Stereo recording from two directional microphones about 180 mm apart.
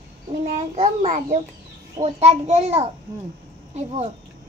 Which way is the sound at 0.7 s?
40° right (ahead or behind).